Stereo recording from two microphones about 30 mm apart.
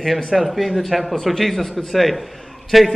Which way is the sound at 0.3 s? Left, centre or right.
Centre.